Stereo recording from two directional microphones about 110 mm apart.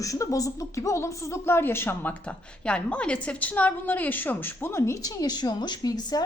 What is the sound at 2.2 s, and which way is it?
A woman's voice, 10° left (ahead or behind).